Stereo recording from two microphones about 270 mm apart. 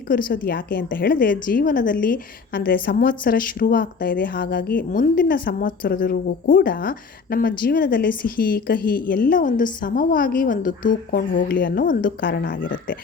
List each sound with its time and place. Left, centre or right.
0.1 s a woman's voice: left